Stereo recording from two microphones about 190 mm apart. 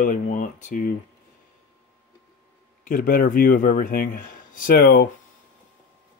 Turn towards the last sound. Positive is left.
turn(degrees=55)  # may be behind; listen again after turning